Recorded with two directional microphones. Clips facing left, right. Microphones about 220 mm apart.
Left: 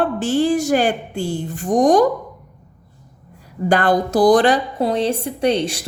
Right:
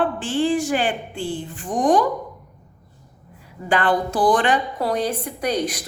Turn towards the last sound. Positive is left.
turn(degrees=25)  # may be behind; listen again after turning